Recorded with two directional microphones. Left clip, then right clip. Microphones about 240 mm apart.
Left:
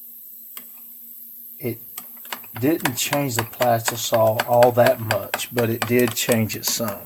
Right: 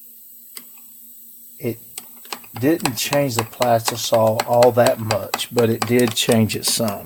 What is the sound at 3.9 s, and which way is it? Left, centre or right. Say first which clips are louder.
Speech: right 2 dB; centre.